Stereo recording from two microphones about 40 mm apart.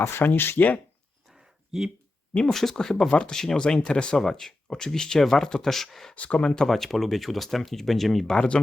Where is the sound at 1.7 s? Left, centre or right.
Centre.